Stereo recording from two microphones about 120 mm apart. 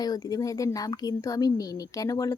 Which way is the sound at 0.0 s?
30° left (ahead or behind).